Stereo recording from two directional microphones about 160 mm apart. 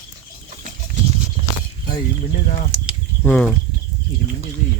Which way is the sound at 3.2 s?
5° left (ahead or behind).